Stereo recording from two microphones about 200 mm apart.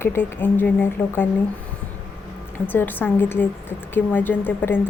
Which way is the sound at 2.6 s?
10° left (ahead or behind).